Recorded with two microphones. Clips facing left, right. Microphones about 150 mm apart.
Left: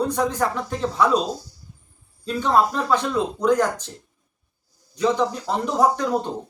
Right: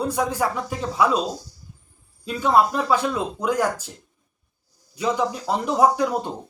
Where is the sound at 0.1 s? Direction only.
10° right (ahead or behind).